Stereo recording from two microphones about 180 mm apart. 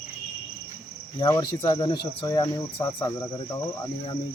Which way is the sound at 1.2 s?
20° left (ahead or behind).